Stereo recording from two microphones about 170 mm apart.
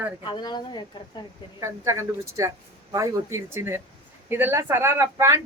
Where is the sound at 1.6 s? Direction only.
20° right (ahead or behind).